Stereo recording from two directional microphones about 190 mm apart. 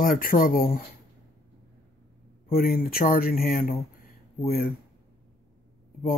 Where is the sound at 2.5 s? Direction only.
50° left (ahead or behind).